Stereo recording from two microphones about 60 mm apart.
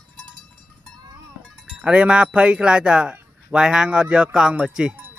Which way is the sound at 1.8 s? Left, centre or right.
Centre.